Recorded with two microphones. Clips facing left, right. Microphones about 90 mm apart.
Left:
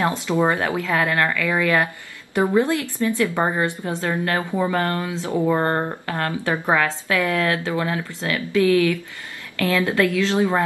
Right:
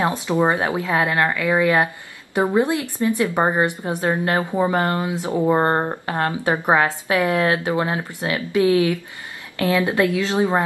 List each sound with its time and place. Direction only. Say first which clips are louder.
0.0 s a woman's voice: right 1 dB; 20° right (ahead or behind)